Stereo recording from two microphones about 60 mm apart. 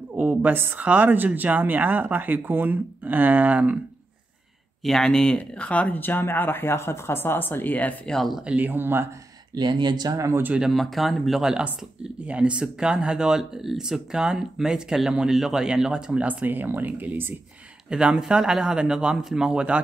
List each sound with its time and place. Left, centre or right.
0.4 s speech: right
4.8 s speech: centre
5.9 s speech: left
8.1 s speech: centre
8.5 s speech: right
9.5 s speech: right
10.6 s speech: centre
12.3 s speech: centre
16.4 s speech: right
17.8 s speech: centre